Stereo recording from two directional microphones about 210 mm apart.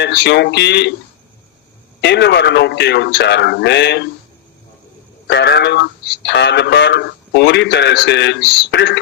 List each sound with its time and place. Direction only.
0.0 s speech: 55° left (ahead or behind)
2.0 s speech: 55° left (ahead or behind)
5.3 s speech: 55° left (ahead or behind)